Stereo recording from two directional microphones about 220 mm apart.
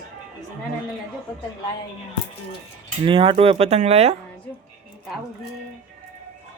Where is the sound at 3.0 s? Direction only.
25° right (ahead or behind).